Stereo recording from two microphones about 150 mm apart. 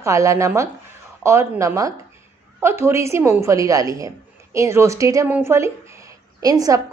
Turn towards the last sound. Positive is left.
turn(degrees=-25)  # may be behind; listen again after turning